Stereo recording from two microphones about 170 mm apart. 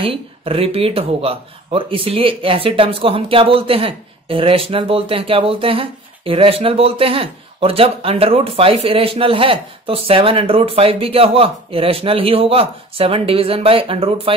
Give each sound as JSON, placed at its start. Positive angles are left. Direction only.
{"t": 0.0, "sound": "speech", "side_deg": -35}